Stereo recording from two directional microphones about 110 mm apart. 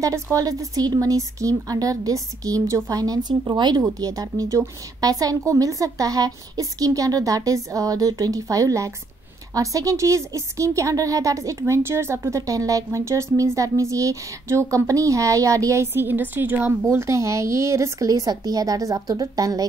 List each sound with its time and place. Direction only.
0.0 s a woman's voice: 30° right (ahead or behind)